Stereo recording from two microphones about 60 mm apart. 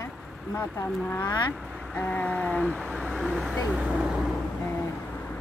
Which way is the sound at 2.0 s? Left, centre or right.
Left.